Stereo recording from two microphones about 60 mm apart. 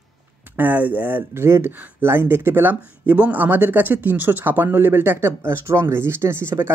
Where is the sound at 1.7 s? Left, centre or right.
Right.